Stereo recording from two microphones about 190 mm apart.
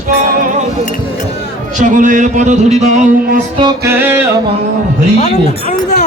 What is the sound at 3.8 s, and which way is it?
Music, 10° right (ahead or behind).